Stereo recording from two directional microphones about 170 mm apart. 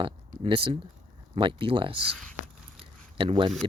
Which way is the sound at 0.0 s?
30° right (ahead or behind).